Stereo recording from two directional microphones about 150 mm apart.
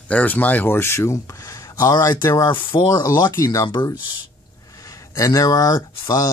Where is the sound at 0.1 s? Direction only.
10° left (ahead or behind).